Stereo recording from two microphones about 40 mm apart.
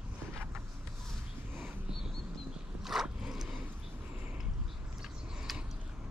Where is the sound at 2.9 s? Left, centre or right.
Centre.